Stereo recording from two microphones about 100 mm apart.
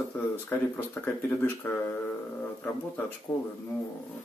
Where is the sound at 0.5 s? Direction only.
20° left (ahead or behind).